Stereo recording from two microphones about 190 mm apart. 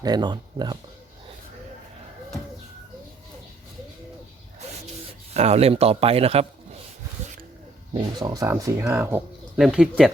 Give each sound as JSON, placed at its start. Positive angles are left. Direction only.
{"t": 0.0, "sound": "speech", "side_deg": -20}
{"t": 5.3, "sound": "speech", "side_deg": -35}
{"t": 7.9, "sound": "speech", "side_deg": -20}